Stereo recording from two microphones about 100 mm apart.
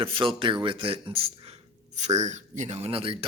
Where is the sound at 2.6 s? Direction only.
90° right; by 3.2 s 70° right (ahead or behind).